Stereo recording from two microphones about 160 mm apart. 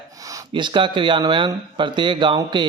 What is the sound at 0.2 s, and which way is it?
Speech, 20° right (ahead or behind).